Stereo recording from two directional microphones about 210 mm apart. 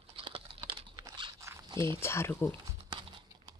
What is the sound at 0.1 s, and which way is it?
Crunch, 25° right (ahead or behind).